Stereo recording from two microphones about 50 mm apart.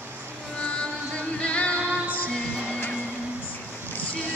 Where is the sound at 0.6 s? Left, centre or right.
Left.